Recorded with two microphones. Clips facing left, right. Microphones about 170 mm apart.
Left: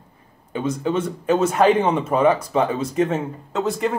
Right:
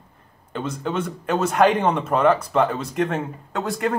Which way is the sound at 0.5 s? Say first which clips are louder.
Left 4 dB; 10° left (ahead or behind).